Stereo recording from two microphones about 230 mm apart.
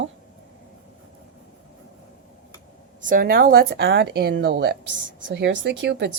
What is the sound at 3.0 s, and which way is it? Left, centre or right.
Speech, right.